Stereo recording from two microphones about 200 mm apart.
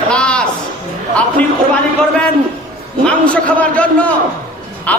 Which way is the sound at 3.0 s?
5° left (ahead or behind).